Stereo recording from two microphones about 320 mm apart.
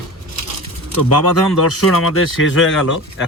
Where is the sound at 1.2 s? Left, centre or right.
Left.